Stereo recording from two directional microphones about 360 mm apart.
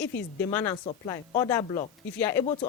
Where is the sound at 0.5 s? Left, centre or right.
Centre.